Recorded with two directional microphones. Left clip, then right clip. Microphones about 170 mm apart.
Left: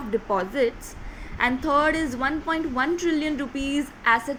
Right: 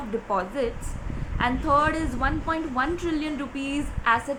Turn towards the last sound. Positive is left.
turn(degrees=15)  # may be behind; listen again after turning